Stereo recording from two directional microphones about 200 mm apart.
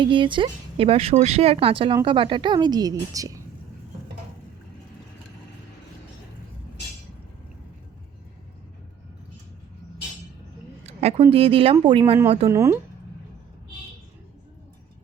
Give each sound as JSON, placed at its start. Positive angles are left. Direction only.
{"t": 0.0, "sound": "speech", "side_deg": -25}
{"t": 10.8, "sound": "speech", "side_deg": -30}
{"t": 12.5, "sound": "speech", "side_deg": -15}